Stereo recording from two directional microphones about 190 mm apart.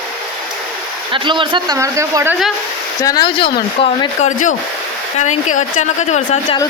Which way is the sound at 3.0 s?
20° left (ahead or behind).